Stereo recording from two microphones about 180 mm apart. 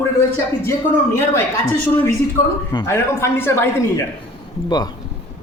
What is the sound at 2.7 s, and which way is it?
Speech, 20° left (ahead or behind).